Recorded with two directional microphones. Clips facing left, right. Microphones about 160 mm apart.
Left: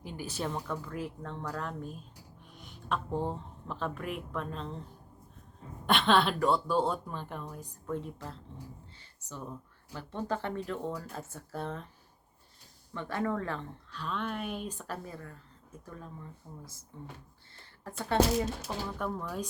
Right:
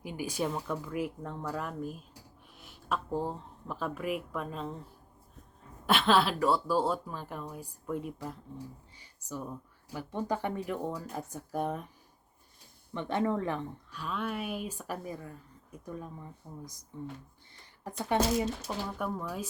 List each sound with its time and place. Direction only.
0.0 s speech: 10° right (ahead or behind)
5.8 s speech: 5° right (ahead or behind)
9.0 s a sound: 10° right (ahead or behind)
9.9 s speech: 15° right (ahead or behind)
12.9 s speech: 20° right (ahead or behind)
17.6 s a sound: 15° right (ahead or behind)
18.9 s speech: 5° right (ahead or behind)